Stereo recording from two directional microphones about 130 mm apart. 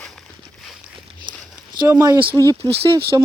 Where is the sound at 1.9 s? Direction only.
20° right (ahead or behind).